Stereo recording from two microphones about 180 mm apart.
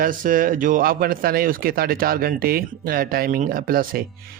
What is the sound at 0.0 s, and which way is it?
A man's voice, 50° right (ahead or behind).